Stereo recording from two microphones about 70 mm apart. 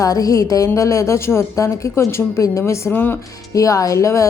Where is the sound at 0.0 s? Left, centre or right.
Left.